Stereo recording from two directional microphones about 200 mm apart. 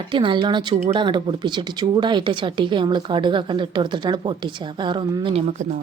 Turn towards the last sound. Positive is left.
turn(degrees=-25)  # may be behind; listen again after turning